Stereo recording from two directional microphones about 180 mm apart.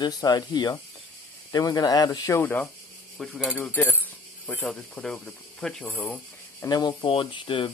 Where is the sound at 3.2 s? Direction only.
Centre (ahead or behind).